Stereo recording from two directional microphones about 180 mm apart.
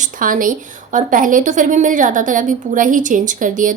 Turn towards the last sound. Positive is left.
turn(degrees=-45)  # may be behind; listen again after turning